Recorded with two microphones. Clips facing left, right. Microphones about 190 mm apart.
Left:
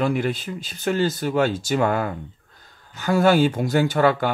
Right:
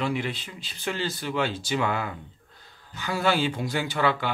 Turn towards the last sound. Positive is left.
turn(degrees=45)  # may be behind; listen again after turning